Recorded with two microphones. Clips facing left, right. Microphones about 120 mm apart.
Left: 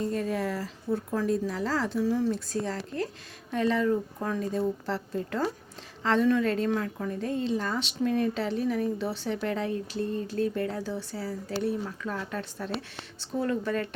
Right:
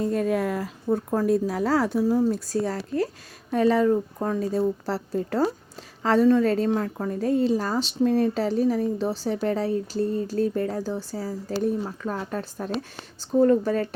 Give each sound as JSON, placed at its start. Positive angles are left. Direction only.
{"t": 0.1, "sound": "speech", "side_deg": -50}